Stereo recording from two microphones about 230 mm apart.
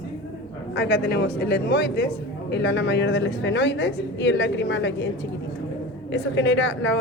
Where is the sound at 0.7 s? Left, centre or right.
Left.